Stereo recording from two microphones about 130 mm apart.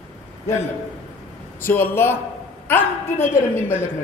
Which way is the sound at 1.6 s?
15° left (ahead or behind).